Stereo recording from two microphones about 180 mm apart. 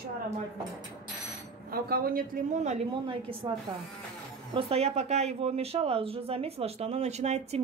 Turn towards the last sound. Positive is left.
turn(degrees=-40)  # may be behind; listen again after turning